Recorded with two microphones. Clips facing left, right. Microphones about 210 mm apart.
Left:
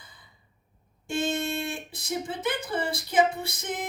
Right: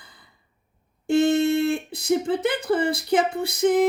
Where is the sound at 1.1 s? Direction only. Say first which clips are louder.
Right 10 dB; 60° right (ahead or behind).